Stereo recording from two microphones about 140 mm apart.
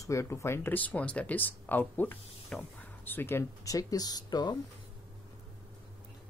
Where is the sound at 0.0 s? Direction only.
20° left (ahead or behind).